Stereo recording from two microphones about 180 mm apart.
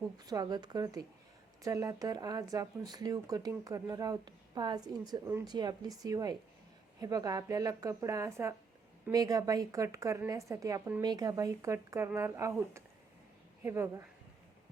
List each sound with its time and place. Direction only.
0.3 s a woman's voice: 20° right (ahead or behind)